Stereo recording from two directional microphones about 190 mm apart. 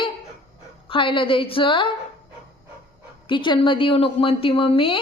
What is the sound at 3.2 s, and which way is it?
Speech, 25° left (ahead or behind).